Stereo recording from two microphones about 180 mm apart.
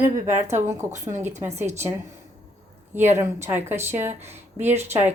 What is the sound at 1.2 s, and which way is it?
Speech, 15° right (ahead or behind).